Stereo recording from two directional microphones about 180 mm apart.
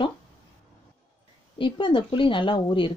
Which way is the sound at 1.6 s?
30° left (ahead or behind).